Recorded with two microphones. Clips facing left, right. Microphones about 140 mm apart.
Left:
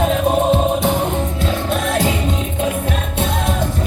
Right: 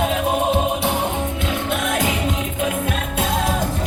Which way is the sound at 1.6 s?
30° left (ahead or behind).